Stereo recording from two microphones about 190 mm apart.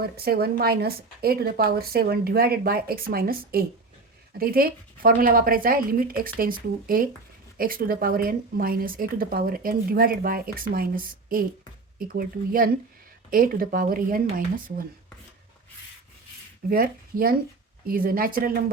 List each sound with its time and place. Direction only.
0.0 s speech: 55° right (ahead or behind)
16.6 s speech: 50° right (ahead or behind)